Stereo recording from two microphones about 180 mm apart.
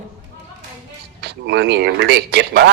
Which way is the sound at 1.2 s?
70° right (ahead or behind).